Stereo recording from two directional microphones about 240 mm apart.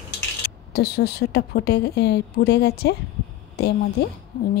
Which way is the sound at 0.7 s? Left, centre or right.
Left.